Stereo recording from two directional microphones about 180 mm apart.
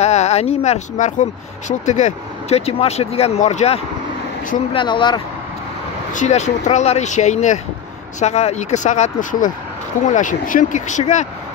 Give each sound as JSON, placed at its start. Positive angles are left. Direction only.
{"t": 0.0, "sound": "speech", "side_deg": 40}
{"t": 6.1, "sound": "speech", "side_deg": 40}